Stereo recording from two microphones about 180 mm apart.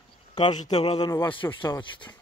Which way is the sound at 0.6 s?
35° left (ahead or behind).